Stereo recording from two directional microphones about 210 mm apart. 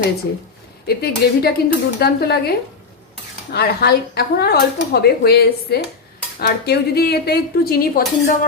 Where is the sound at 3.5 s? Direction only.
50° left (ahead or behind).